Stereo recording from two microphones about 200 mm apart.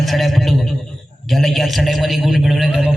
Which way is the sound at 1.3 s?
Centre (ahead or behind).